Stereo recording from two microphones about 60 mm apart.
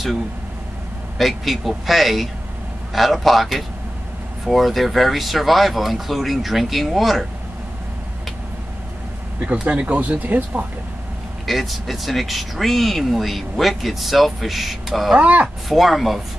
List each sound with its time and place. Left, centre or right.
1.1 s speech: centre
9.5 s speech: right
11.4 s speech: centre
15.1 s speech: right
15.4 s speech: centre